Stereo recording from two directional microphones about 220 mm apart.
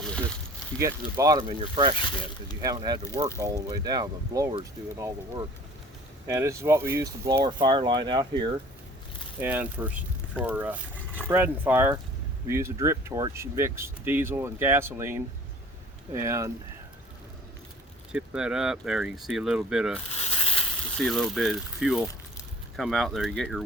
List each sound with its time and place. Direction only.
0.0 s a sound: 5° left (ahead or behind)
0.8 s speech: 10° right (ahead or behind)
9.4 s speech: 10° right (ahead or behind)
18.1 s speech: 5° right (ahead or behind)
20.1 s a sound: 25° left (ahead or behind)
21.0 s speech: centre (ahead or behind)